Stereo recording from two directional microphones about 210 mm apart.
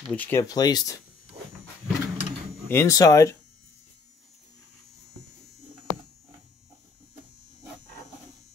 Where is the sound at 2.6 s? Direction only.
15° left (ahead or behind).